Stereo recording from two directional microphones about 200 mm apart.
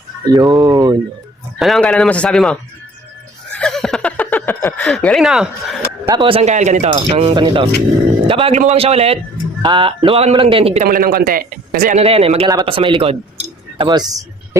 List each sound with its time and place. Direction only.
0.5 s speech: 20° right (ahead or behind)
1.5 s speech: centre (ahead or behind)
3.5 s a sound: 5° left (ahead or behind)
6.1 s speech: 25° right (ahead or behind)
10.8 s a man's voice: 45° right (ahead or behind)
11.9 s speech: 30° right (ahead or behind)